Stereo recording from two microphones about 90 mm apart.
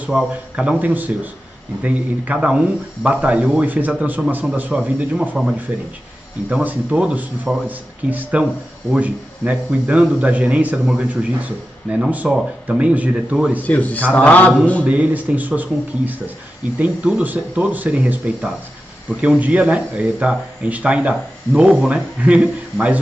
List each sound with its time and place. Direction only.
0.1 s speech: 10° right (ahead or behind)
6.5 s speech: 15° right (ahead or behind)
13.6 s a man's voice: 15° left (ahead or behind)
14.9 s speech: 15° right (ahead or behind)
16.7 s speech: 15° right (ahead or behind)